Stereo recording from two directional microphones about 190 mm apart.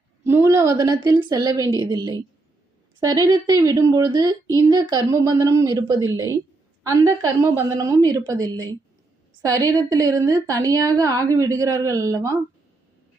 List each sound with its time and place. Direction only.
0.3 s a woman's voice: 15° right (ahead or behind)